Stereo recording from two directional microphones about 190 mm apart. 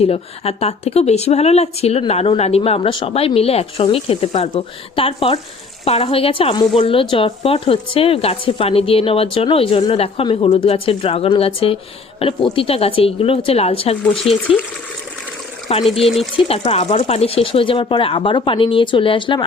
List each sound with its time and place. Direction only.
0.0 s speech: 30° left (ahead or behind)
16.0 s speech: centre (ahead or behind)
16.5 s speech: 30° left (ahead or behind)